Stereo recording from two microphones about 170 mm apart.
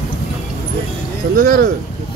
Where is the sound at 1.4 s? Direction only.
55° right (ahead or behind).